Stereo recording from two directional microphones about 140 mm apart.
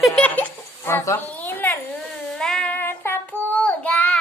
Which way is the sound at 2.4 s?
5° left (ahead or behind).